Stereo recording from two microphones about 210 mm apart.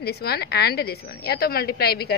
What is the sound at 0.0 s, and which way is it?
A woman's voice, 50° left (ahead or behind).